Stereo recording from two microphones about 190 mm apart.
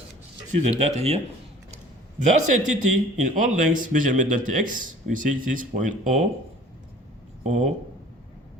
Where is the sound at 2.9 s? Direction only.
40° right (ahead or behind).